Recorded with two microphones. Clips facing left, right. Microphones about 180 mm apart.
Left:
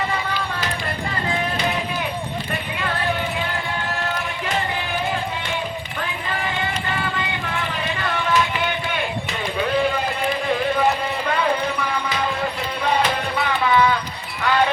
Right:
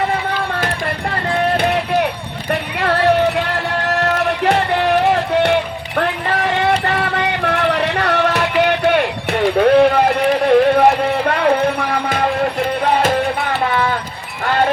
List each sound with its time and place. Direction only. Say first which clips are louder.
1.5 s a sound: right 8 dB; 60° right (ahead or behind)
2.5 s music: right 12 dB; 75° right (ahead or behind)
12.0 s music: right 7 dB; 50° right (ahead or behind)
14.4 s music: right 2 dB; 50° right (ahead or behind)